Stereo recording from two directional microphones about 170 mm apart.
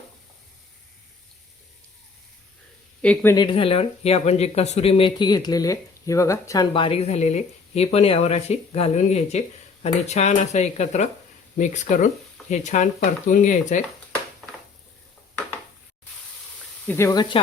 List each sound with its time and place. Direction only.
3.0 s speech: 5° left (ahead or behind)
3.3 s speech: 25° left (ahead or behind)
6.7 s speech: 35° left (ahead or behind)
16.8 s speech: 15° left (ahead or behind)